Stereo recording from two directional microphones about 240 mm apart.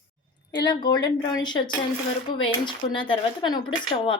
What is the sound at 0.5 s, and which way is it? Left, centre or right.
A woman's voice, centre.